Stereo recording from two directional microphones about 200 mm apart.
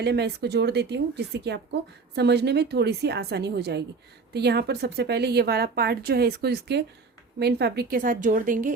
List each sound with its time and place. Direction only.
0.0 s a woman's voice: 55° right (ahead or behind); by 8.7 s 40° right (ahead or behind)